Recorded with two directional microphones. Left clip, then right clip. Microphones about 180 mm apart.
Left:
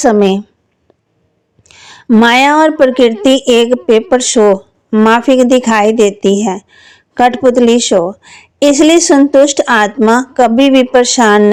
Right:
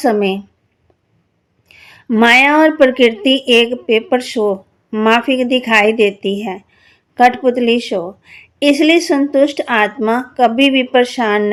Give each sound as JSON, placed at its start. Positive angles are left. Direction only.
{"t": 0.0, "sound": "a woman's voice", "side_deg": 40}
{"t": 1.6, "sound": "a woman's voice", "side_deg": 40}